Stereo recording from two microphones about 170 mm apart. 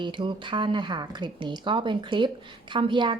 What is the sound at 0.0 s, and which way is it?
A woman's voice, 30° right (ahead or behind).